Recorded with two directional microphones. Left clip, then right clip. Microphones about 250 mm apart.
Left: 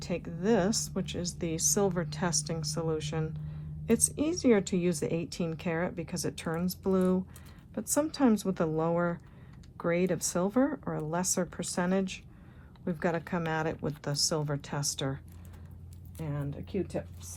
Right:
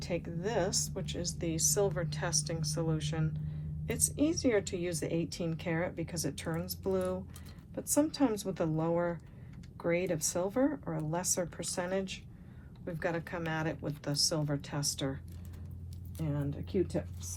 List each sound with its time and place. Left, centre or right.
0.0 s a woman's voice: left
16.2 s a woman's voice: left